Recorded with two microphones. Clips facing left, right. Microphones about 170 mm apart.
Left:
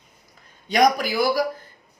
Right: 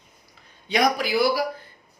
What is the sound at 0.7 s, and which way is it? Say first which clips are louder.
Speech: left 3 dB; 45° left (ahead or behind).